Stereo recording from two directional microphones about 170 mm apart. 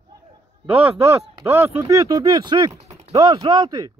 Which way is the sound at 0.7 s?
35° right (ahead or behind).